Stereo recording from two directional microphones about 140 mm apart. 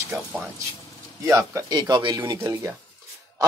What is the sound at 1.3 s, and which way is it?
Speech, 20° right (ahead or behind).